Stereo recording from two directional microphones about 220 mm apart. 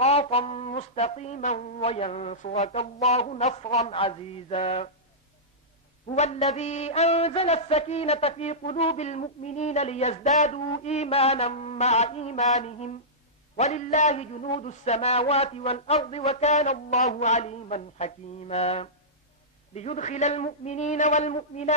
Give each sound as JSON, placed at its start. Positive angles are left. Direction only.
{"t": 0.0, "sound": "speech", "side_deg": 25}
{"t": 3.1, "sound": "music", "side_deg": 30}
{"t": 6.1, "sound": "music", "side_deg": 30}
{"t": 19.7, "sound": "a man's voice", "side_deg": 30}